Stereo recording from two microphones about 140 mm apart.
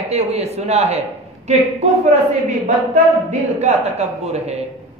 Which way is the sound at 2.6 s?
60° right (ahead or behind).